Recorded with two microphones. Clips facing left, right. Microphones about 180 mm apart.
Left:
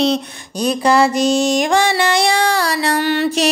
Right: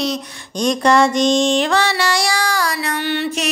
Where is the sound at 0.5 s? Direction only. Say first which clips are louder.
Even; 5° left (ahead or behind).